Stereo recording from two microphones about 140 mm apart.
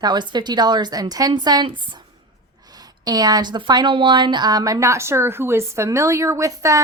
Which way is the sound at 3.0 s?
30° right (ahead or behind).